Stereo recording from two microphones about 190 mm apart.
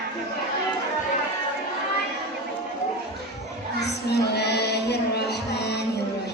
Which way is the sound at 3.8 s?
60° left (ahead or behind).